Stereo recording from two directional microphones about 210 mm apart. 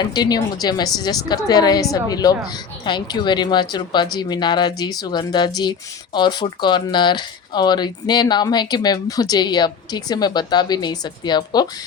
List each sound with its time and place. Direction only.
0.0 s a woman's voice: 20° left (ahead or behind)